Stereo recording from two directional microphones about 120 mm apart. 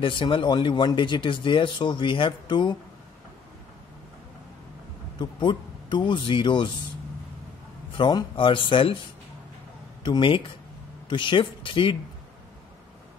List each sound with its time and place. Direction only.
0.0 s speech: 45° left (ahead or behind)
5.2 s speech: 40° left (ahead or behind)
8.0 s speech: 35° left (ahead or behind)
10.0 s speech: 40° left (ahead or behind)